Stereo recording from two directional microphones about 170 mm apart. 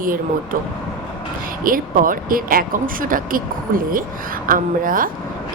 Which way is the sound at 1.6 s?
55° right (ahead or behind).